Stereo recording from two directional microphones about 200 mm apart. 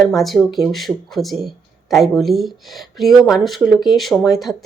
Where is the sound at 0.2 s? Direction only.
Centre (ahead or behind).